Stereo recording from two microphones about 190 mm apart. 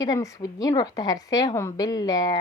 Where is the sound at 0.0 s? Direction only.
20° left (ahead or behind).